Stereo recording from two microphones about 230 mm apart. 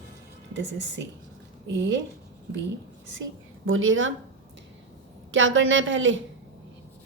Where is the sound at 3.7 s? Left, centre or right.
Right.